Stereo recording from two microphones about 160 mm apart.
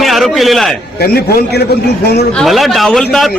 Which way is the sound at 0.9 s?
85° left.